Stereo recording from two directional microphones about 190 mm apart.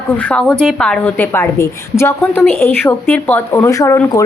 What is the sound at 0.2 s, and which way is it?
A woman's voice, 5° left (ahead or behind).